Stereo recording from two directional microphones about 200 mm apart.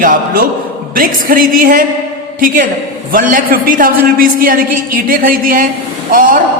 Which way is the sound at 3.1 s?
40° right (ahead or behind).